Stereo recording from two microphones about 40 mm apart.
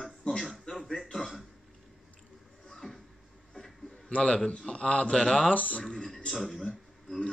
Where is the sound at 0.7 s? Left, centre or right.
Left.